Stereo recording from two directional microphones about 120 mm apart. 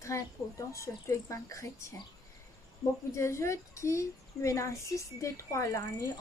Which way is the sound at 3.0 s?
25° left (ahead or behind).